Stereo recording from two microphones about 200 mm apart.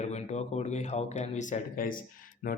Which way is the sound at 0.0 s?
35° left (ahead or behind).